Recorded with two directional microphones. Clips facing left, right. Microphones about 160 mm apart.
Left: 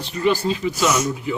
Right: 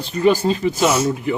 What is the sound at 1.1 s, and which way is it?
Speech, 60° right (ahead or behind).